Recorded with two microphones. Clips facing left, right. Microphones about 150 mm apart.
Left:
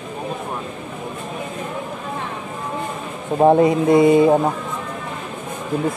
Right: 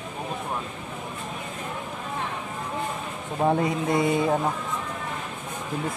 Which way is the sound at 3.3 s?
35° left (ahead or behind).